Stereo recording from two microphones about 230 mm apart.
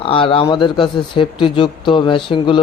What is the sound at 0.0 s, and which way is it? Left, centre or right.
Speech, left.